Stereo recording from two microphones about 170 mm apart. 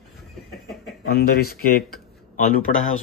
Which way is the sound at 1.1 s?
65° left (ahead or behind).